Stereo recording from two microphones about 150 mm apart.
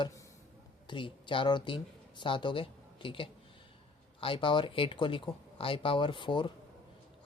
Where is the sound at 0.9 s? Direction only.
35° left (ahead or behind).